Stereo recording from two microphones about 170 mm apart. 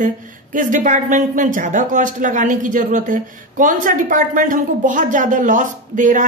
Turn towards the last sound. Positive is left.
turn(degrees=-50)  # may be behind; listen again after turning